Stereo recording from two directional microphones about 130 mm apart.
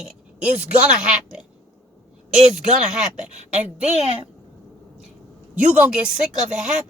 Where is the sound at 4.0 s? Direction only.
45° right (ahead or behind).